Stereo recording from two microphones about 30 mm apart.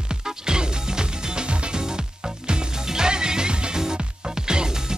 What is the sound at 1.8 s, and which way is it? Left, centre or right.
Music, right.